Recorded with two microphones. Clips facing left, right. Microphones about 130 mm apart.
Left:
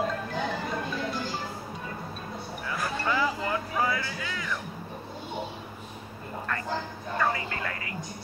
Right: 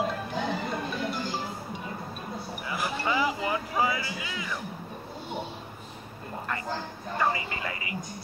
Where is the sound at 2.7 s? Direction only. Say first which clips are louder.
Even; 10° right (ahead or behind).